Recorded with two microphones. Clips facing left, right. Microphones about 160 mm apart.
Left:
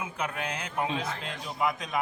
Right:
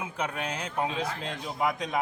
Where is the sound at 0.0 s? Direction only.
30° right (ahead or behind).